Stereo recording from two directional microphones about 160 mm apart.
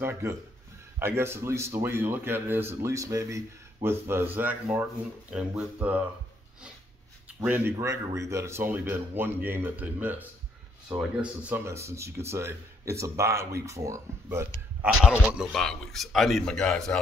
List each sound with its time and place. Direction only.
0.0 s a man's voice: 15° right (ahead or behind)
7.3 s a man's voice: 10° right (ahead or behind)
14.8 s a man's voice: 5° right (ahead or behind)